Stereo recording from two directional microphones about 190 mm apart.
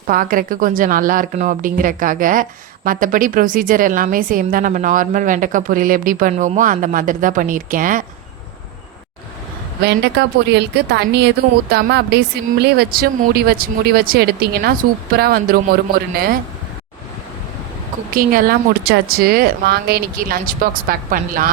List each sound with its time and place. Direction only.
0.1 s speech: 45° right (ahead or behind)
9.8 s a woman's voice: 65° right (ahead or behind)
18.1 s speech: 50° right (ahead or behind)